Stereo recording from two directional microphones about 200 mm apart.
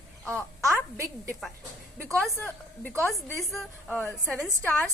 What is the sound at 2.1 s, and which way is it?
A woman's voice, 5° left (ahead or behind).